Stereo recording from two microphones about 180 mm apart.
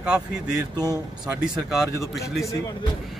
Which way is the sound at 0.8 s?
20° right (ahead or behind).